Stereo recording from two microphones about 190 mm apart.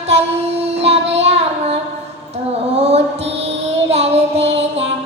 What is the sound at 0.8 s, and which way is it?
Child singing, 35° right (ahead or behind).